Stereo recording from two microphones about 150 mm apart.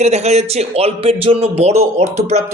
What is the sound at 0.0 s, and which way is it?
A man's voice, 45° right (ahead or behind).